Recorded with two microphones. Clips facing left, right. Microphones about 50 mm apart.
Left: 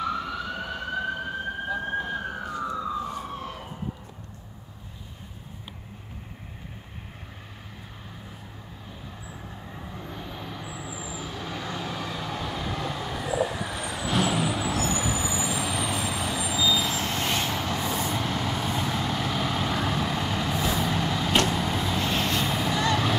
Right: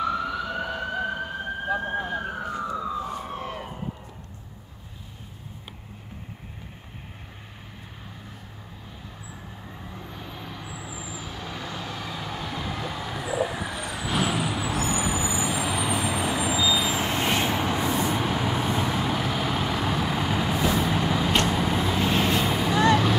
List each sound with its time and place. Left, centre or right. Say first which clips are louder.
0.0 s emergency vehicle: right 3 dB; centre
3.3 s emergency vehicle: right 3 dB; right
9.9 s vehicle: left 2 dB; centre